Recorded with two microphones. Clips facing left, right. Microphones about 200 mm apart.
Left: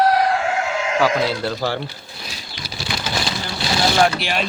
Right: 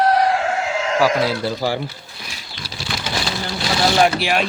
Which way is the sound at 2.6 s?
35° right (ahead or behind).